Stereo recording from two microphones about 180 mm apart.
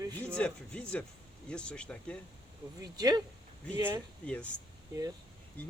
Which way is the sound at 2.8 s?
20° right (ahead or behind).